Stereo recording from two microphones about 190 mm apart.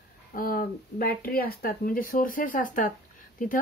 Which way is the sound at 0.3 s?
50° left (ahead or behind).